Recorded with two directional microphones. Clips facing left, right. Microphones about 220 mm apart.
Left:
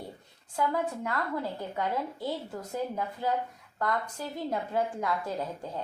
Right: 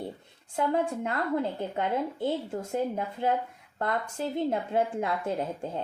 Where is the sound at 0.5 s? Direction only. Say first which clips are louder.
Right 3 dB; 25° right (ahead or behind).